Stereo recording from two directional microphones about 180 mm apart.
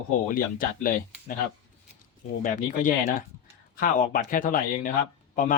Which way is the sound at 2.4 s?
45° left (ahead or behind).